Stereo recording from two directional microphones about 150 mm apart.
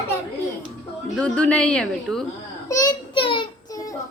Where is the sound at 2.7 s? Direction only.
20° left (ahead or behind).